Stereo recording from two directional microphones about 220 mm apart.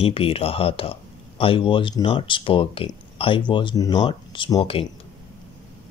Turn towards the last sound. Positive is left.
turn(degrees=20)  # may be behind; listen again after turning